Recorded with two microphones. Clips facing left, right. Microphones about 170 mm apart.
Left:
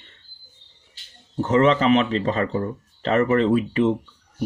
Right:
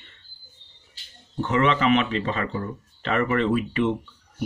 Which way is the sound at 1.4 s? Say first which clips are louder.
Left 4 dB; 40° left (ahead or behind).